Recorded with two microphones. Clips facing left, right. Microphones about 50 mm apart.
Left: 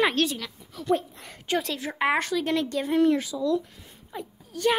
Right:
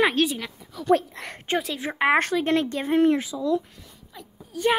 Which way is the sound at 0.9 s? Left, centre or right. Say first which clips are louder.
Right 5 dB; right.